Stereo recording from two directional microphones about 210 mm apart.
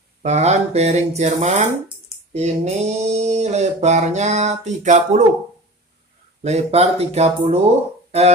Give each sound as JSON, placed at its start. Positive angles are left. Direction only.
{"t": 0.2, "sound": "speech", "side_deg": -30}
{"t": 6.4, "sound": "speech", "side_deg": -30}